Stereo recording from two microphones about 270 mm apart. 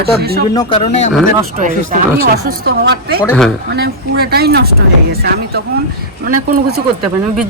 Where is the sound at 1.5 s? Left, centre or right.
Right.